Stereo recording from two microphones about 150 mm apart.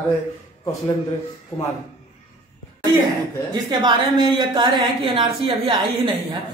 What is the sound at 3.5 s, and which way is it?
A woman's voice, 25° right (ahead or behind).